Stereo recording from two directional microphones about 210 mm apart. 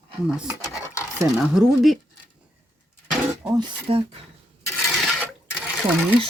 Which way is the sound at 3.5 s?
20° right (ahead or behind).